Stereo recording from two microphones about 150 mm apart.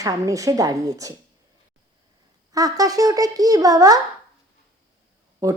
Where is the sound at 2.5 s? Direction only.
25° right (ahead or behind).